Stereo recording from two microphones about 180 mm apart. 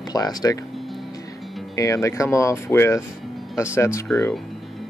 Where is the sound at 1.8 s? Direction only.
15° left (ahead or behind).